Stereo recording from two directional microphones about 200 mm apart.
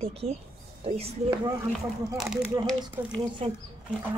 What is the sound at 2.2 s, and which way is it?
Speech, centre (ahead or behind).